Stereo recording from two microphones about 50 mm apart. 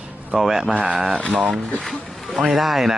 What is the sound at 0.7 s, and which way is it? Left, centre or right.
Speech, right.